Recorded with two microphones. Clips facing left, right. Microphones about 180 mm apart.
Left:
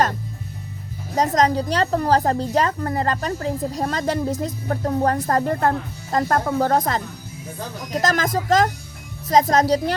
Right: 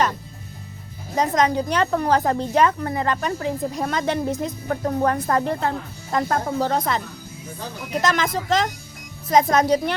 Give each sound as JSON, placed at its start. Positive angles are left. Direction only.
{"t": 1.1, "sound": "a woman's voice", "side_deg": 40}